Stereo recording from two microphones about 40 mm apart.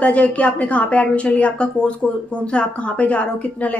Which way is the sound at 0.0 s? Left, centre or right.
Left.